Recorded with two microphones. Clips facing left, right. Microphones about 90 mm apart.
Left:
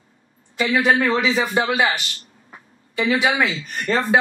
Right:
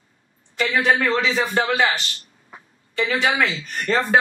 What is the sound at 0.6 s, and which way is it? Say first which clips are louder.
Speech: left 2 dB; 5° left (ahead or behind).